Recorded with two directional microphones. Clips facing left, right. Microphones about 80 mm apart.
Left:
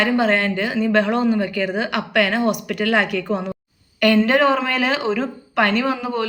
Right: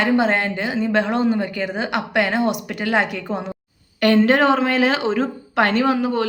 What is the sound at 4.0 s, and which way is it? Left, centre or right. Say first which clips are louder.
Speech: even; right.